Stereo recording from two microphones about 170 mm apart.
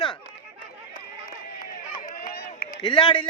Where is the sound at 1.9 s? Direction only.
50° left (ahead or behind).